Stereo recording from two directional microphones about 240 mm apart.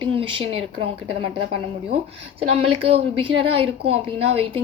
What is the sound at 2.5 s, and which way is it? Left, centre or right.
A woman's voice, right.